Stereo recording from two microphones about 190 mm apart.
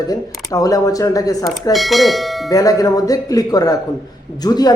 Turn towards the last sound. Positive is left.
turn(degrees=20)  # may be behind; listen again after turning